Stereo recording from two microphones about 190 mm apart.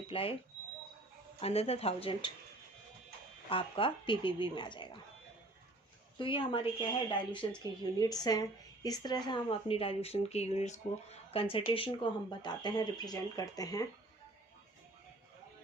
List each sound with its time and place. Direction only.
0.1 s speech: 30° left (ahead or behind)
1.4 s speech: 30° left (ahead or behind)
3.5 s speech: 25° left (ahead or behind)
6.1 s speech: 25° left (ahead or behind)